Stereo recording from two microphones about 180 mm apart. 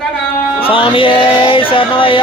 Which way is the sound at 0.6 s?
30° left (ahead or behind).